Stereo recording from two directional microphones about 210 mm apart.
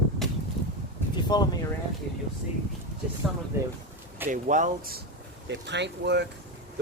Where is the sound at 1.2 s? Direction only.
20° left (ahead or behind).